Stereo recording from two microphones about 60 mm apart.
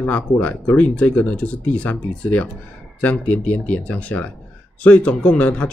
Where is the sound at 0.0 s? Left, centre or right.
Left.